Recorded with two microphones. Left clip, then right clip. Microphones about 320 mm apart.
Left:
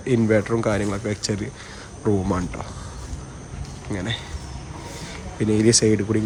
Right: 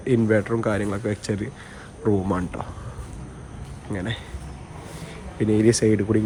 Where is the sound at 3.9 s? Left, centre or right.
Centre.